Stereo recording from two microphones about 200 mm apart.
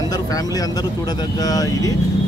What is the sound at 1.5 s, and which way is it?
Speech, 20° left (ahead or behind).